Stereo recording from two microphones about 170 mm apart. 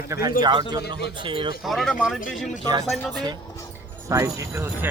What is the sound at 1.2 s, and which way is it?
Speech, 30° right (ahead or behind).